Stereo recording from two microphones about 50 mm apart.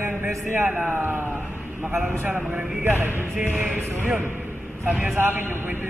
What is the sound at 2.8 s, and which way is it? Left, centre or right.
Mantra, right.